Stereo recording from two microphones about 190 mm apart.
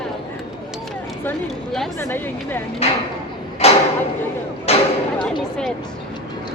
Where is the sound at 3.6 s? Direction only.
30° left (ahead or behind).